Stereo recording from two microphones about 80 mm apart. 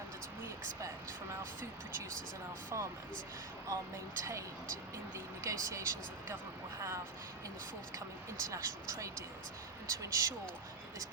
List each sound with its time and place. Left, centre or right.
2.7 s speech: right
8.4 s speech: right